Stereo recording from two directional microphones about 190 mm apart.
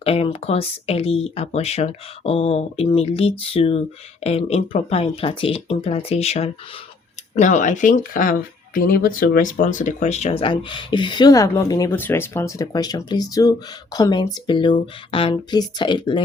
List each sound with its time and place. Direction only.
0.0 s speech: 30° left (ahead or behind)